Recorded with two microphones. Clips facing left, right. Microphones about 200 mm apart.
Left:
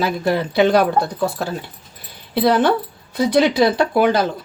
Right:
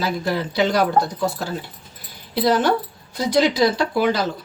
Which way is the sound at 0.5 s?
60° left (ahead or behind).